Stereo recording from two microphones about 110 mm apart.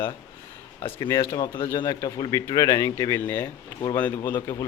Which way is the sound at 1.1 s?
25° left (ahead or behind).